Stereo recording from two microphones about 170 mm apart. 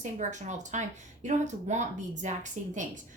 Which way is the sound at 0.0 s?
45° right (ahead or behind).